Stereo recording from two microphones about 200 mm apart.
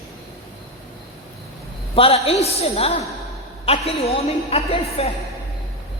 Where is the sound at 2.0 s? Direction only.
30° left (ahead or behind).